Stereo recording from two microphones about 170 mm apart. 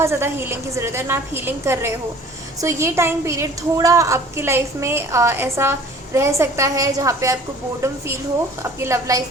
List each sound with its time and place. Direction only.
0.0 s a woman's voice: 15° right (ahead or behind)
8.6 s a woman's voice: 15° right (ahead or behind)